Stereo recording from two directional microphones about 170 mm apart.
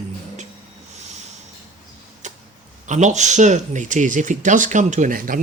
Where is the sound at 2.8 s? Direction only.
45° right (ahead or behind).